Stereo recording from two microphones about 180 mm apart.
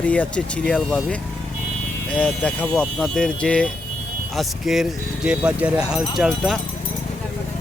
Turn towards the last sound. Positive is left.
turn(degrees=0)  # may be behind; listen again after turning